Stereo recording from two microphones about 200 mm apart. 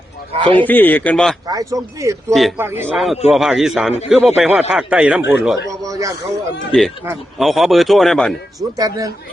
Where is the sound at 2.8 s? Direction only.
Centre (ahead or behind).